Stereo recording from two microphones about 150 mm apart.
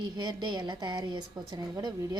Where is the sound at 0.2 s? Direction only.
30° right (ahead or behind).